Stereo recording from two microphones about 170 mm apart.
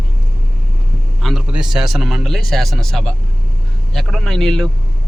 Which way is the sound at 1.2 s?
Centre (ahead or behind).